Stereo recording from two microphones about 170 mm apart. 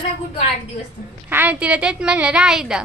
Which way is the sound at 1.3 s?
10° right (ahead or behind).